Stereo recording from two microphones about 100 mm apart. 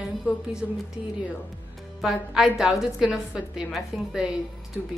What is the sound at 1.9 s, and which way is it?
A woman's voice, centre (ahead or behind).